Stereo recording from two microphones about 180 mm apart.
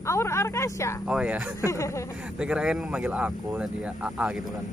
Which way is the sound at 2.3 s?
5° right (ahead or behind).